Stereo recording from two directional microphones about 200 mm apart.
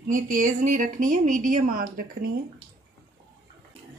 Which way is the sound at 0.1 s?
40° right (ahead or behind).